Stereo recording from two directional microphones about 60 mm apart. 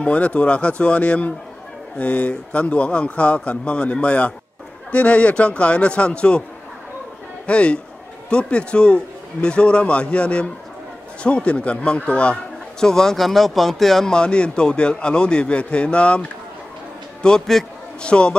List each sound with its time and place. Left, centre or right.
0.0 s speech: left
7.4 s speech: centre
12.8 s speech: centre